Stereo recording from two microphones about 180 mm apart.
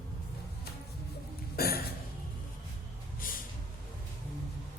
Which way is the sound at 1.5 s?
60° left (ahead or behind).